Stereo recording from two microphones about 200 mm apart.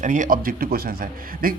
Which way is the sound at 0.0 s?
40° right (ahead or behind).